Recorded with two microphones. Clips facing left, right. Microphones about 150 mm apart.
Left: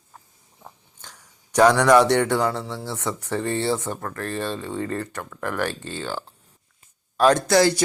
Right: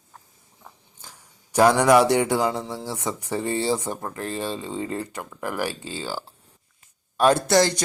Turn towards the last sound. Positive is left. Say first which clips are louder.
# left 1 dB
turn(degrees=5)  # may be behind; listen again after turning